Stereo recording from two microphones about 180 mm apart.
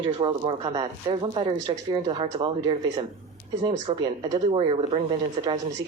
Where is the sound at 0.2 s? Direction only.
25° right (ahead or behind).